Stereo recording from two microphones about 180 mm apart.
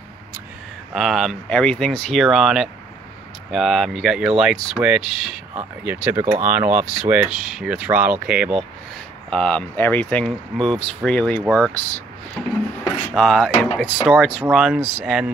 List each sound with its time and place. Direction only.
0.9 s speech: centre (ahead or behind)
9.3 s speech: 5° left (ahead or behind)
14.0 s speech: 10° right (ahead or behind)